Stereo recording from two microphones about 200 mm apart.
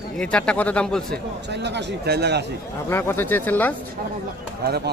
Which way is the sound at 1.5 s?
60° right (ahead or behind).